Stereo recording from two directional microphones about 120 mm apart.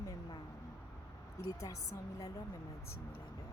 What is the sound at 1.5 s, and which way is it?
Speech, 30° left (ahead or behind).